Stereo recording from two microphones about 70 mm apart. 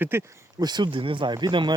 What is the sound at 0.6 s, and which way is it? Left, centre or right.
Speech, right.